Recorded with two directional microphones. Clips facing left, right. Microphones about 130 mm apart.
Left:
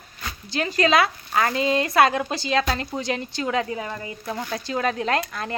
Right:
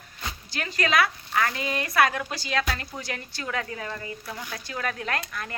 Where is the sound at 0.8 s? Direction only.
25° left (ahead or behind).